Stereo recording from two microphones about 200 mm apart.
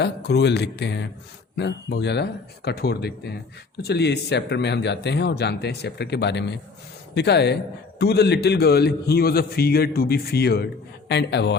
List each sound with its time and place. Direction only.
0.0 s a man's voice: 55° left (ahead or behind)